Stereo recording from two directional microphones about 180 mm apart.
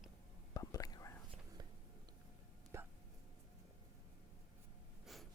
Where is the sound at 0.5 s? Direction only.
20° left (ahead or behind).